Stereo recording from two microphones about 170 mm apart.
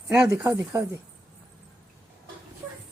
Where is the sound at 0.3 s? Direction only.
20° right (ahead or behind).